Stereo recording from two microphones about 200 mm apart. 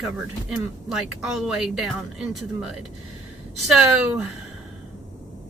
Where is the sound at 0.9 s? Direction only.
Centre (ahead or behind).